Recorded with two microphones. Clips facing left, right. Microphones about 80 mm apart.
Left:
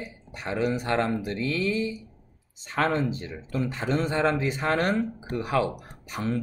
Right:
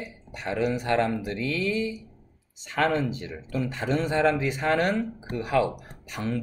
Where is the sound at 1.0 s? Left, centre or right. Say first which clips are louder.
Right 1 dB; left.